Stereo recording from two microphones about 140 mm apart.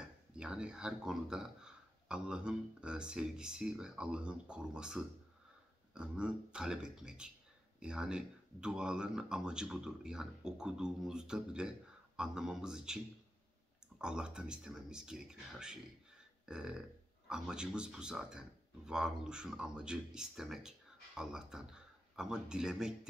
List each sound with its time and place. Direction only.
0.3 s speech: 5° right (ahead or behind)